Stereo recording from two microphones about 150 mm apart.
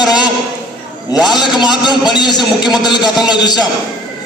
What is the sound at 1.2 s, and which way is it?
A man's voice, 30° left (ahead or behind).